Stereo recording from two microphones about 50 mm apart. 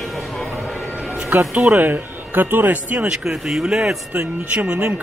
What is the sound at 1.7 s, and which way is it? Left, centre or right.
Speech, right.